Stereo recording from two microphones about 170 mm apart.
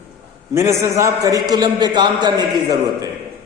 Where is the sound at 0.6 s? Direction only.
15° right (ahead or behind).